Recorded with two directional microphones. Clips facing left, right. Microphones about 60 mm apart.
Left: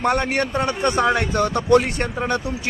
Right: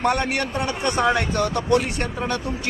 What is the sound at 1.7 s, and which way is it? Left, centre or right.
Speech, left.